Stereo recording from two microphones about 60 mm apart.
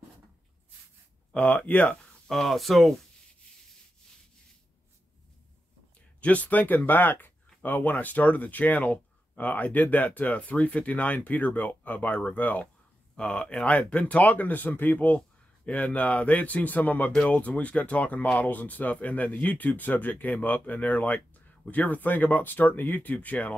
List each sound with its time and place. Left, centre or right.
1.3 s speech: left
2.2 s speech: centre
6.2 s speech: left
13.1 s speech: centre